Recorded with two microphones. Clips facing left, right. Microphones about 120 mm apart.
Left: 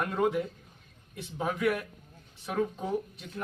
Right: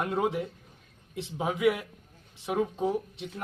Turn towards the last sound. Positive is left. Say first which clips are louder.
# even
turn(degrees=-20)  # may be behind; listen again after turning